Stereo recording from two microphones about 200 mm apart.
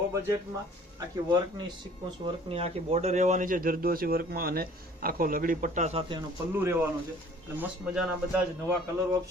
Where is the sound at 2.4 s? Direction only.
30° right (ahead or behind).